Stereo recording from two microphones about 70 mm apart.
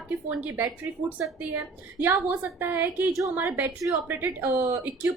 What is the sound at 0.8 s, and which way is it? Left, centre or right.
A woman's voice, right.